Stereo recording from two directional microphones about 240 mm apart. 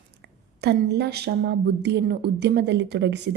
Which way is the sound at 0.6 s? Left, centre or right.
Right.